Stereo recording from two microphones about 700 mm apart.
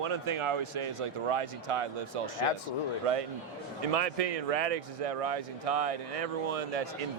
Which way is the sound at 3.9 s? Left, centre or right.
Right.